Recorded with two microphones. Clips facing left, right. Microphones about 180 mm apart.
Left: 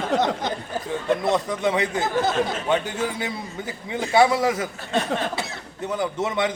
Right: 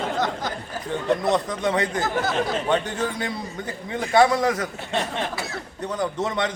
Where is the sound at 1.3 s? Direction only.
5° left (ahead or behind).